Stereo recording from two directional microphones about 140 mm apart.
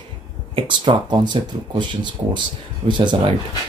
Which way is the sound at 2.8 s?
35° right (ahead or behind).